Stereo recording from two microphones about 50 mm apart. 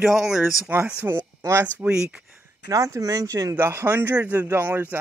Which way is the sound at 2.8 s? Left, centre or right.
Right.